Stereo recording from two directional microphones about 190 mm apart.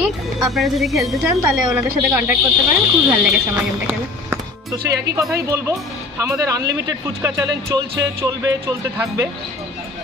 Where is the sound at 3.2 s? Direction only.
10° right (ahead or behind).